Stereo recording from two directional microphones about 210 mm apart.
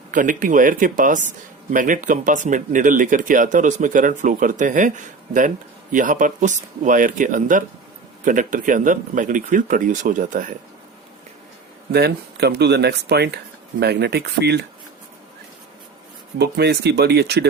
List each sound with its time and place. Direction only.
0.1 s speech: 40° right (ahead or behind)
11.9 s speech: 50° right (ahead or behind)
16.4 s speech: 50° right (ahead or behind)